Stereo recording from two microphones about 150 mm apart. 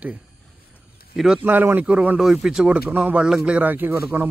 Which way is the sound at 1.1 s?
5° right (ahead or behind).